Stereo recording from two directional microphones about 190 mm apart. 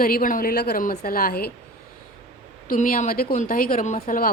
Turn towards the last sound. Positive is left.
turn(degrees=50)  # may be behind; listen again after turning